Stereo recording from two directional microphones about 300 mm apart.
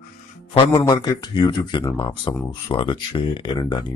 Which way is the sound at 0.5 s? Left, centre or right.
Centre.